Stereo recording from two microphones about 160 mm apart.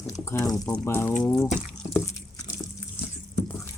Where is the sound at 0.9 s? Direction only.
15° left (ahead or behind).